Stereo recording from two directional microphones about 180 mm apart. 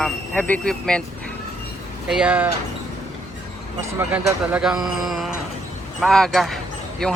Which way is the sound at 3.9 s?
10° right (ahead or behind).